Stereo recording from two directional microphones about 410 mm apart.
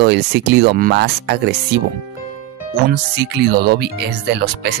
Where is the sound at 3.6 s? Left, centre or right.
Right.